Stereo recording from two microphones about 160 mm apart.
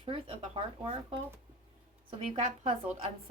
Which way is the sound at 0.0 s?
35° right (ahead or behind).